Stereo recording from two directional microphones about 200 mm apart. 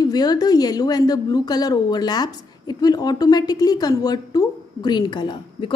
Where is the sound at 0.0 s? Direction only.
20° left (ahead or behind).